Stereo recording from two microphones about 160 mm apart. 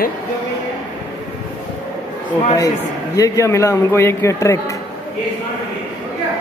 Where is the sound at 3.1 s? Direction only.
20° left (ahead or behind).